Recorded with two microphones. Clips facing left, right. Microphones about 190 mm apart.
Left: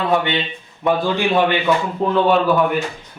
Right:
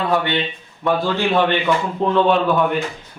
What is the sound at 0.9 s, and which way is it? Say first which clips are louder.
Speech: left 1 dB; 15° left (ahead or behind).